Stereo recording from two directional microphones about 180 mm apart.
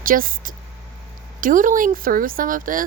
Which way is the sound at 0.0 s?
50° right (ahead or behind).